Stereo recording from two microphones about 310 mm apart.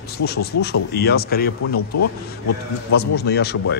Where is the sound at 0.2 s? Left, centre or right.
Left.